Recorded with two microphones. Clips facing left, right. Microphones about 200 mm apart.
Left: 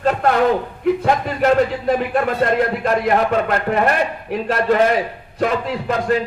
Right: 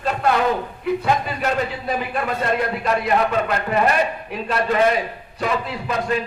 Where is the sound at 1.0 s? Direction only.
70° left (ahead or behind).